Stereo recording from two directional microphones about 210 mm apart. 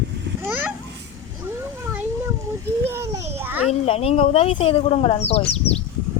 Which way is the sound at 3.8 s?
30° left (ahead or behind).